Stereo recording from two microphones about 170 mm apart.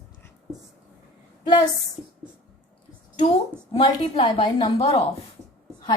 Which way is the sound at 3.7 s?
30° left (ahead or behind).